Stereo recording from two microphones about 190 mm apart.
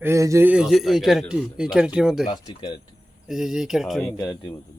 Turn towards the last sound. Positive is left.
turn(degrees=20)  # may be behind; listen again after turning